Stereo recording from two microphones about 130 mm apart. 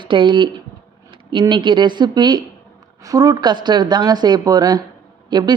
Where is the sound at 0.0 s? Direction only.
40° right (ahead or behind).